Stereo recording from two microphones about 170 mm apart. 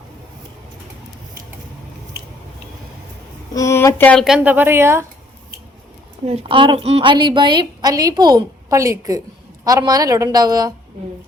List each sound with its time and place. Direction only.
3.5 s speech: 15° left (ahead or behind)
4.4 s a woman's voice: 10° right (ahead or behind)
6.2 s a woman's voice: 35° right (ahead or behind)